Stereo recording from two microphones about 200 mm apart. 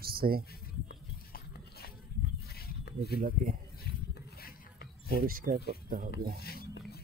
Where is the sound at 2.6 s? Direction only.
50° left (ahead or behind).